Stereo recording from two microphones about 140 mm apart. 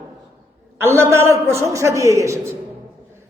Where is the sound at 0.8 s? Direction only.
20° right (ahead or behind).